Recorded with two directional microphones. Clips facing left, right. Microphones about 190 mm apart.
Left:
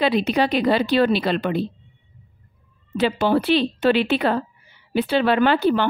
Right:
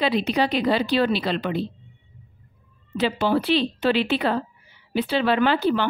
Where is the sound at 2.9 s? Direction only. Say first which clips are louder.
Left 3 dB; 50° left (ahead or behind).